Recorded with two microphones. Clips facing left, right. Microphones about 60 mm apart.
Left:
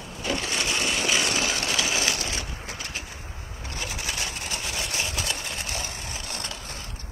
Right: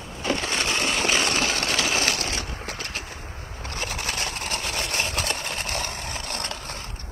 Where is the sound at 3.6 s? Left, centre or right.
Right.